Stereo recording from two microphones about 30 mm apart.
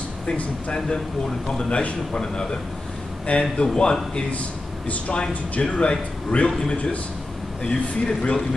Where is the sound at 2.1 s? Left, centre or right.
Left.